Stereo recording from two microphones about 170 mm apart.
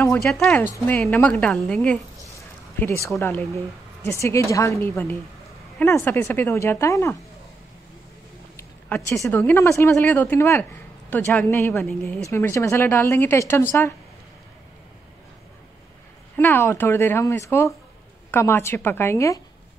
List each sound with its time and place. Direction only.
0.2 s speech: 5° left (ahead or behind)
2.3 s a sound: 15° left (ahead or behind)
3.2 s speech: 15° left (ahead or behind)
8.5 s speech: 15° left (ahead or behind)
12.3 s speech: 15° left (ahead or behind)
16.3 s speech: 10° left (ahead or behind)